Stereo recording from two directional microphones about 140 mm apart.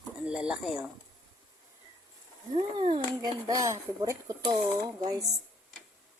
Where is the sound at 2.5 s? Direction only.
35° right (ahead or behind).